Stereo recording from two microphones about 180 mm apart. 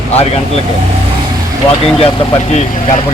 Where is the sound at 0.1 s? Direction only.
35° left (ahead or behind).